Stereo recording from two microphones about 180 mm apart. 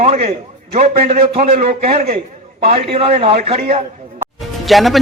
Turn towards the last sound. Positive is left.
turn(degrees=0)  # may be behind; listen again after turning